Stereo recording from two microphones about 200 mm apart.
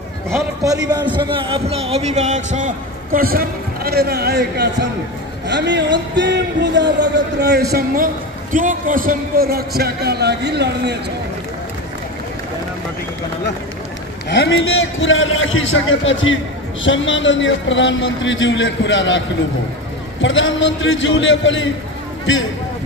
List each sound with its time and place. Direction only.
0.7 s a man's voice: 20° right (ahead or behind); by 7.6 s 55° right (ahead or behind)
7.7 s a man's voice: 45° right (ahead or behind)
14.3 s a man's voice: 70° left (ahead or behind)